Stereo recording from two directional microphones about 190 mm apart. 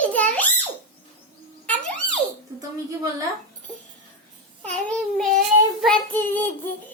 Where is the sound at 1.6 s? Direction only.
10° left (ahead or behind).